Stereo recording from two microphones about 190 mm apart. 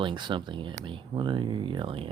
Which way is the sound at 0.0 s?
25° right (ahead or behind).